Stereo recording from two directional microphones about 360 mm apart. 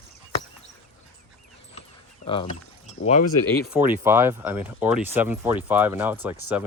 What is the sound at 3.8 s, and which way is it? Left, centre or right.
Speech, centre.